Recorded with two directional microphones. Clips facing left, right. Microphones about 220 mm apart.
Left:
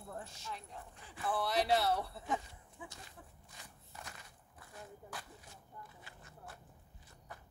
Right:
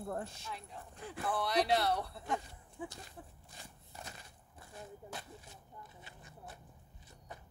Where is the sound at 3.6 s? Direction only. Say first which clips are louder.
Right 2 dB; 30° right (ahead or behind).